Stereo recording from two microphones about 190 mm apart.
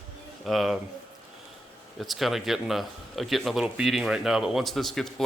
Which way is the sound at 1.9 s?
Centre (ahead or behind).